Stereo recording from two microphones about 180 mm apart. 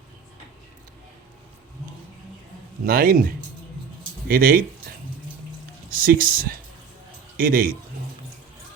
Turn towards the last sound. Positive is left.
turn(degrees=-55)  # may be behind; listen again after turning